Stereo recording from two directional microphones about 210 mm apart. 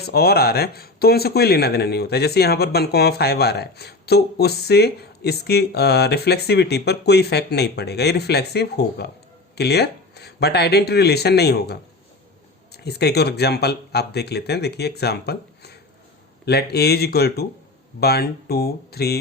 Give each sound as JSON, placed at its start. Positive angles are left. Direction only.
{"t": 0.0, "sound": "speech", "side_deg": 50}